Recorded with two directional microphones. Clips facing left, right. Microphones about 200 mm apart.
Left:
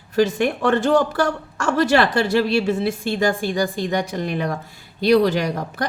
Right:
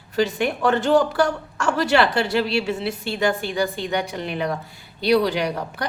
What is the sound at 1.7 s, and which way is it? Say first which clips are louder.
A woman's voice: left 2 dB; 45° left (ahead or behind).